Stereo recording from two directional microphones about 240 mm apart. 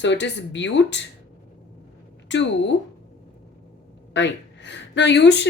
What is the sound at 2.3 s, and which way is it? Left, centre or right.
Speech, left.